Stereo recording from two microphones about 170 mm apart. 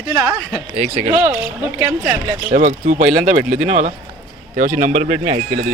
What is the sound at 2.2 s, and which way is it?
Speech, 45° right (ahead or behind).